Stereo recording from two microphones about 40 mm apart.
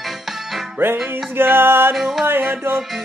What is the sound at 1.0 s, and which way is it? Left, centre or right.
Music, right.